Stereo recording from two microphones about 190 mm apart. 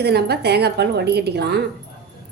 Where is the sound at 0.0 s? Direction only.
60° right (ahead or behind).